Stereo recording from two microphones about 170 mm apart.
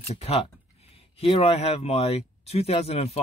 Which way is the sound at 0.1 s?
35° left (ahead or behind).